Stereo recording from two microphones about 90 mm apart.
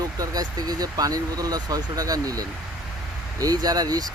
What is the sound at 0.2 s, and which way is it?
Speech, 45° right (ahead or behind).